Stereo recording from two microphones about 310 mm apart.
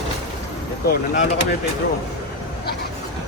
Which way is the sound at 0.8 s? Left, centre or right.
Left.